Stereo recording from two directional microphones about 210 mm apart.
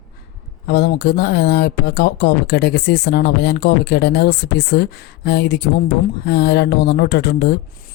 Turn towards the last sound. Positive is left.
turn(degrees=50)  # may be behind; listen again after turning